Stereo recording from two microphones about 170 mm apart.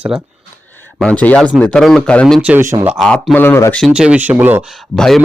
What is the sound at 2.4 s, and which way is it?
Speech, 10° right (ahead or behind).